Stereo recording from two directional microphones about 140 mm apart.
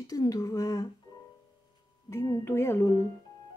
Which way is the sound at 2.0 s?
20° left (ahead or behind).